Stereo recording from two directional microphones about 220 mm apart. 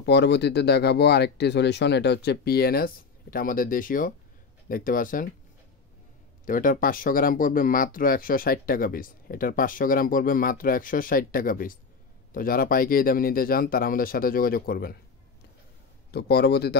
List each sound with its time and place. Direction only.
0.0 s speech: 50° left (ahead or behind)
6.4 s speech: 40° left (ahead or behind)
16.1 s speech: 50° left (ahead or behind)